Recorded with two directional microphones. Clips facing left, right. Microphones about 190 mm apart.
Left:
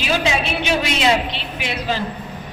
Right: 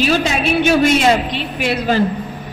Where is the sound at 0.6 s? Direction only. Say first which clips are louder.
Right 7 dB; 50° right (ahead or behind).